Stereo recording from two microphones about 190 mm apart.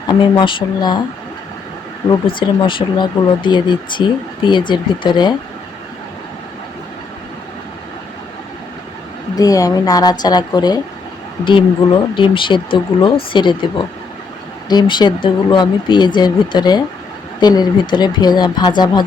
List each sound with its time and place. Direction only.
0.1 s speech: 25° left (ahead or behind)
2.0 s speech: 25° left (ahead or behind)
9.3 s speech: 20° left (ahead or behind)
14.7 s speech: 25° left (ahead or behind)